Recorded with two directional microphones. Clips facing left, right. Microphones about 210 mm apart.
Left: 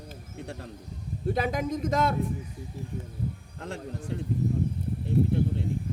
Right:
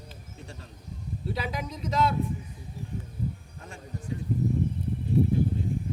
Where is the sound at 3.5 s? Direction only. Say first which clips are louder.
Left 6 dB; 75° left (ahead or behind).